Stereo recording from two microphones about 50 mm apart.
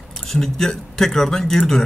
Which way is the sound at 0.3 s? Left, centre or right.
Centre.